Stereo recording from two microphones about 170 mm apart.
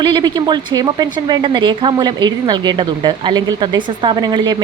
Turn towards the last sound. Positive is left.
turn(degrees=-25)  # may be behind; listen again after turning